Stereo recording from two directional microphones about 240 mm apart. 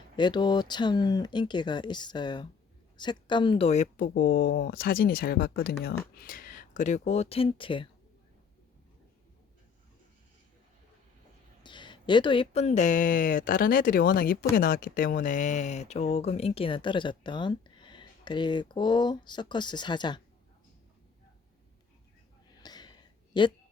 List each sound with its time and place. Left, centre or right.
0.2 s speech: centre
11.6 s speech: centre
22.6 s a sound: centre
23.3 s speech: centre